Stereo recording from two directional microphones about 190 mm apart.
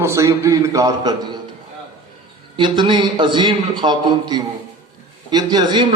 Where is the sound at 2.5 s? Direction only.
25° right (ahead or behind).